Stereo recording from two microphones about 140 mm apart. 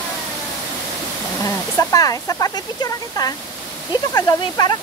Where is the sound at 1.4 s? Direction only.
25° left (ahead or behind).